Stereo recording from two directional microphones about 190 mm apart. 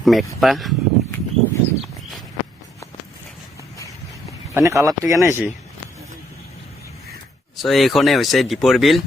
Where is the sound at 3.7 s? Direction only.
15° left (ahead or behind).